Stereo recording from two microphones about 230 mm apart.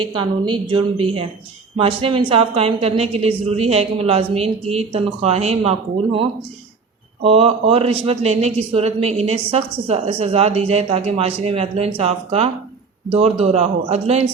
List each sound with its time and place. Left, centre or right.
0.0 s speech: right